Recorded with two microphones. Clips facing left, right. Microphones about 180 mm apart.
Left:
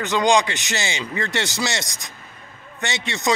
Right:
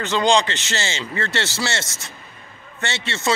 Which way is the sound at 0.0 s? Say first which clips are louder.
Even; 15° left (ahead or behind).